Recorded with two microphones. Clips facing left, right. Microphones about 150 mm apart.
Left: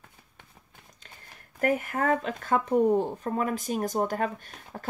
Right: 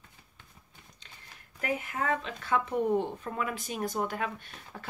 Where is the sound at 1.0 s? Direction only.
45° left (ahead or behind).